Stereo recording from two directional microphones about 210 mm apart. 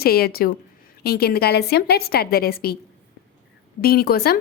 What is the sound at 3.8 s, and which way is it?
Speech, 45° left (ahead or behind).